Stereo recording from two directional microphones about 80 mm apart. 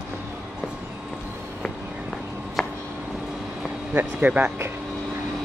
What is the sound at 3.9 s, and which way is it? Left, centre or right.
Speech, right.